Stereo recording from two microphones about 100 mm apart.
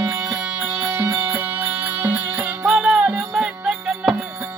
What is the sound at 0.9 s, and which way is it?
Music, 25° right (ahead or behind).